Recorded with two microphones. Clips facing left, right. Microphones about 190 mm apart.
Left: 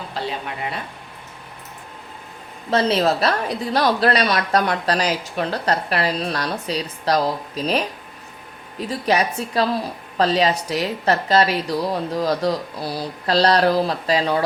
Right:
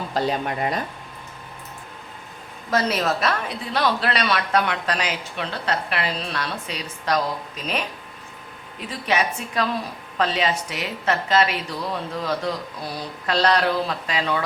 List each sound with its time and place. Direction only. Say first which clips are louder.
0.1 s speech: right 5 dB; 45° right (ahead or behind)
2.6 s a woman's voice: left 4 dB; 30° left (ahead or behind)
8.9 s a woman's voice: left 3 dB; 35° left (ahead or behind)